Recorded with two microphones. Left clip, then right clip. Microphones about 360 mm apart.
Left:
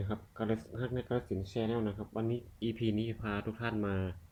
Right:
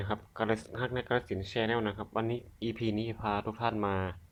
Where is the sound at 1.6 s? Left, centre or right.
Right.